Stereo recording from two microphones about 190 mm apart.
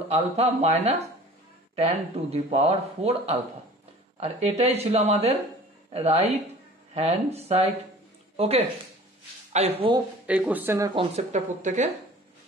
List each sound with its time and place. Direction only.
0.1 s speech: 35° right (ahead or behind)
10.2 s speech: 5° right (ahead or behind)
11.0 s speech: 35° right (ahead or behind)